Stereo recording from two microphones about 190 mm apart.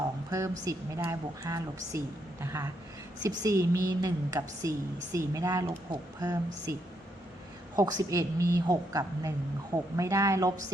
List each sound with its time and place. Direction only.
0.3 s a woman's voice: 15° right (ahead or behind)
7.8 s a woman's voice: 20° right (ahead or behind)